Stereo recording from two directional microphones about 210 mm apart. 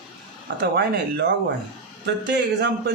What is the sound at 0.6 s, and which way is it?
Speech, 50° right (ahead or behind).